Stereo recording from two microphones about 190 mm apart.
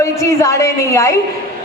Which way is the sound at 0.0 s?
15° left (ahead or behind).